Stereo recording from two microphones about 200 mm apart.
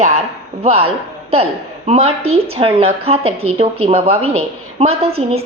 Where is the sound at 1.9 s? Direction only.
30° right (ahead or behind).